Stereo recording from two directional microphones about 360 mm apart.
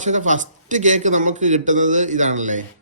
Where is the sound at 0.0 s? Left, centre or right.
Centre.